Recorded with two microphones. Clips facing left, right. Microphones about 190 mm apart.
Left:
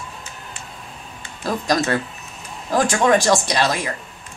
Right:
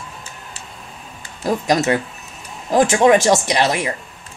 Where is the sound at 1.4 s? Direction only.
20° right (ahead or behind).